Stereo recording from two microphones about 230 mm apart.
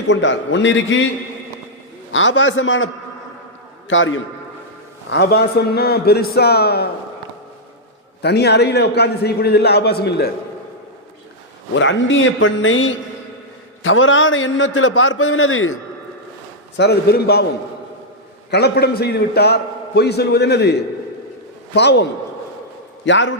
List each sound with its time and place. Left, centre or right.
0.1 s a man's voice: left
2.1 s a man's voice: left
5.1 s a man's voice: left
8.2 s a man's voice: left
11.7 s a man's voice: left
16.7 s a man's voice: left
18.5 s a man's voice: left
21.8 s a man's voice: left
23.0 s a man's voice: left